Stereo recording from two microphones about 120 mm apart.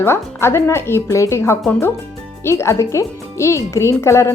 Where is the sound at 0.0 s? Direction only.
20° left (ahead or behind).